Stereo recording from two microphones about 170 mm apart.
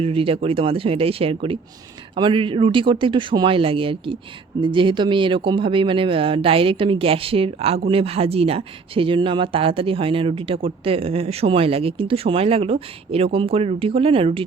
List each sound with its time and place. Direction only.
0.0 s speech: 35° right (ahead or behind)